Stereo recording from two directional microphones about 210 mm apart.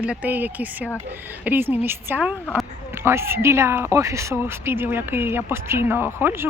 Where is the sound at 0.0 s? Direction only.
5° right (ahead or behind).